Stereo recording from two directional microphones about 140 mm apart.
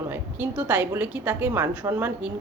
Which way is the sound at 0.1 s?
10° right (ahead or behind).